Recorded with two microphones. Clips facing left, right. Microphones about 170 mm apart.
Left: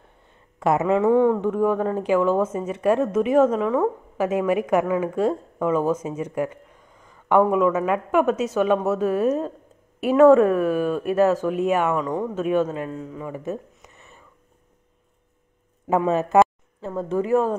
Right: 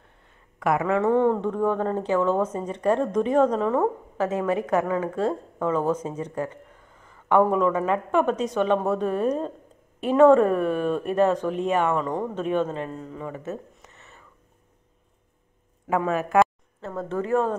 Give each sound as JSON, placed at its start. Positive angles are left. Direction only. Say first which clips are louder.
{"t": 0.6, "sound": "speech", "louder": "left 3 dB", "side_deg": 25}
{"t": 1.0, "sound": "a woman's voice", "louder": "left 3 dB", "side_deg": 5}
{"t": 15.9, "sound": "speech", "louder": "left 4 dB", "side_deg": 25}
{"t": 16.8, "sound": "speech", "louder": "left 4 dB", "side_deg": 15}